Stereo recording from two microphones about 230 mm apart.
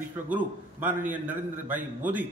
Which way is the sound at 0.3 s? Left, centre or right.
Centre.